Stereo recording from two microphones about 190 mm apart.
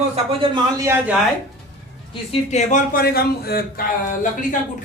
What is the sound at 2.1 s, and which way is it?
A man's voice, 35° left (ahead or behind).